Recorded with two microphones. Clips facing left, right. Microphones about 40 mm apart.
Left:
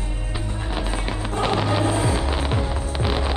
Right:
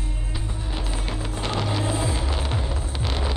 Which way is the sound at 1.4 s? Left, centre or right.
Left.